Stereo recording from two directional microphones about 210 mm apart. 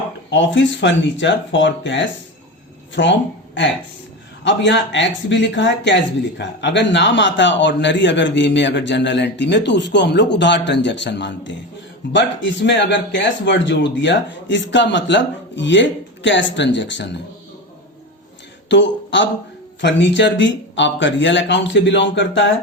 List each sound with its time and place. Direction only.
0.3 s speech: 60° left (ahead or behind)
18.7 s speech: 60° left (ahead or behind)